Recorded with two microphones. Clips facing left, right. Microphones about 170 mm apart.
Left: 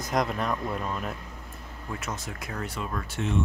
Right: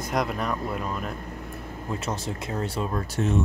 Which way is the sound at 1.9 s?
30° right (ahead or behind).